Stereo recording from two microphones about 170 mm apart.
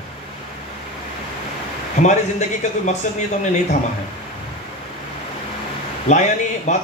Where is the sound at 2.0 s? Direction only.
45° left (ahead or behind).